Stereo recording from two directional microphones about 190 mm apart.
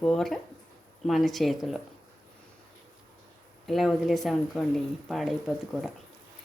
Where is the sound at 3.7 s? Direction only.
Centre (ahead or behind).